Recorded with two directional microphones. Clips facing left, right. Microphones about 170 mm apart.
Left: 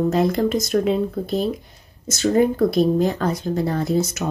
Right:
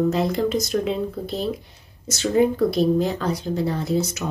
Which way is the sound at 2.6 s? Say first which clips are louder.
Left 2 dB; 50° left (ahead or behind).